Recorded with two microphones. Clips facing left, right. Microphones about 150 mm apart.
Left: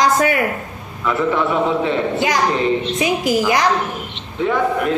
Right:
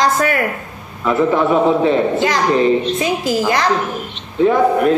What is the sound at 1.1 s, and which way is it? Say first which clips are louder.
Speech: right 4 dB; 40° right (ahead or behind).